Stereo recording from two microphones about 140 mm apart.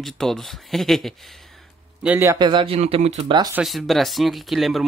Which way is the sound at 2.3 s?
35° right (ahead or behind).